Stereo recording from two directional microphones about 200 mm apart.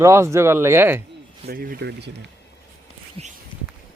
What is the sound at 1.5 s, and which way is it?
Speech, 50° right (ahead or behind).